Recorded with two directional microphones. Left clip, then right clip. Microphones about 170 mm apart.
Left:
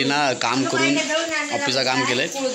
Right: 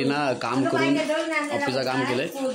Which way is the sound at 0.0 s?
Centre (ahead or behind).